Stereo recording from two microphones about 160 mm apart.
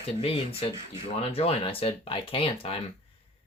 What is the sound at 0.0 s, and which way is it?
Speech, 40° left (ahead or behind).